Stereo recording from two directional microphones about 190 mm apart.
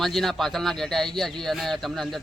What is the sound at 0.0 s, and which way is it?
Speech, centre (ahead or behind).